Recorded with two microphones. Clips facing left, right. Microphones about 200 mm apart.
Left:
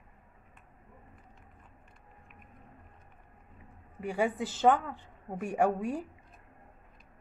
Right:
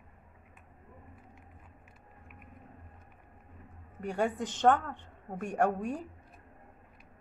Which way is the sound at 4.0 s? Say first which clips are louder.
Left 1 dB; 5° left (ahead or behind).